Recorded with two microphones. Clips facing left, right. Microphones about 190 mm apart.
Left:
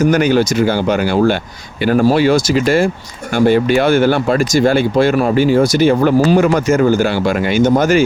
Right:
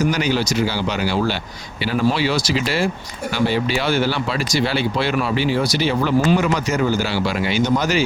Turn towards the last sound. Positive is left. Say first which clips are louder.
# left 7 dB
turn(degrees=50)  # may be behind; listen again after turning